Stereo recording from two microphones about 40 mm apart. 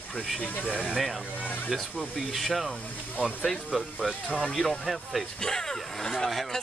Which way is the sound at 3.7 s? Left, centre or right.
Right.